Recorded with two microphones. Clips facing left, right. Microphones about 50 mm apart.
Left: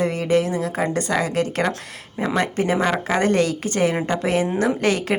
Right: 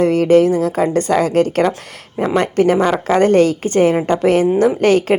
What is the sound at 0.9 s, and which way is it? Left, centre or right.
Speech, right.